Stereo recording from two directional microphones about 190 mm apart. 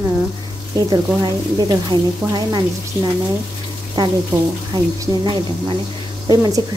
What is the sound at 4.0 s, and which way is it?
A woman's voice, 20° right (ahead or behind).